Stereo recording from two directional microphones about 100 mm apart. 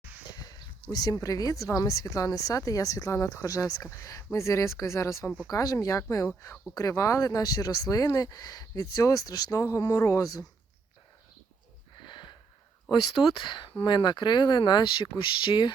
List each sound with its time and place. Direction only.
0.3 s a sound: 40° left (ahead or behind)
0.9 s speech: 40° left (ahead or behind)
11.9 s sniff: 50° left (ahead or behind)
12.9 s speech: 50° left (ahead or behind)
13.7 s speech: 65° left (ahead or behind)
13.9 s speech: 50° left (ahead or behind)